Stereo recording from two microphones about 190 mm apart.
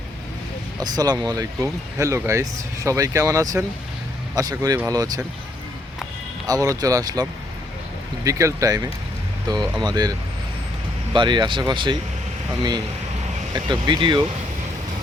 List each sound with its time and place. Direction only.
0.8 s speech: 20° right (ahead or behind)
6.5 s speech: 20° right (ahead or behind)
13.7 s speech: 25° right (ahead or behind)